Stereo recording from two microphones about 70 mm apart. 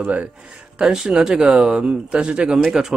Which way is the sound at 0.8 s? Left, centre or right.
Centre.